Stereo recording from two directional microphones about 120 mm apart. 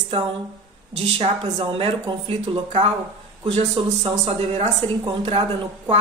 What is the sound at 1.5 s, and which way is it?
A woman's voice, 45° right (ahead or behind).